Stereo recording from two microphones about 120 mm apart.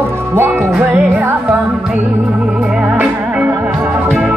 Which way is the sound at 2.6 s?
5° right (ahead or behind).